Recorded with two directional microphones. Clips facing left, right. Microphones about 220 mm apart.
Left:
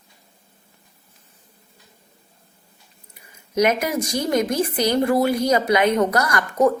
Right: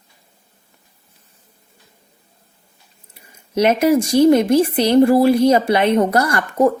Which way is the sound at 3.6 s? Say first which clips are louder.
Right 6 dB; 30° right (ahead or behind).